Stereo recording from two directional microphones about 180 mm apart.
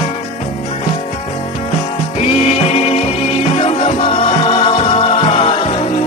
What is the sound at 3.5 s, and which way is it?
Music, 35° left (ahead or behind).